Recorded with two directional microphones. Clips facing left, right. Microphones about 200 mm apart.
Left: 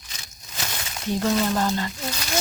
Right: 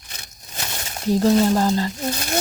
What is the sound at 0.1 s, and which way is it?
Speech, 55° right (ahead or behind).